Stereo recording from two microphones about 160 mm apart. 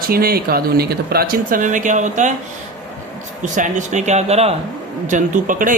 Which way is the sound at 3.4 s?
50° right (ahead or behind).